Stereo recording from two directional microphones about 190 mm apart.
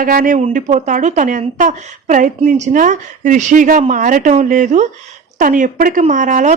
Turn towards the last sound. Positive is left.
turn(degrees=-40)  # may be behind; listen again after turning